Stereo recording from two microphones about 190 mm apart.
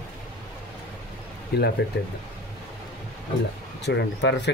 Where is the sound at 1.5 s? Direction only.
55° left (ahead or behind).